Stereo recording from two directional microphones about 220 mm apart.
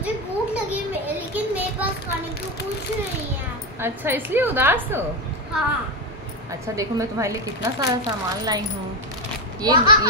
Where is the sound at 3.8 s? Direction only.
10° right (ahead or behind).